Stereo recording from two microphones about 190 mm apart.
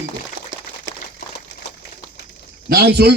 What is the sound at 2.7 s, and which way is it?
Speech, 60° right (ahead or behind).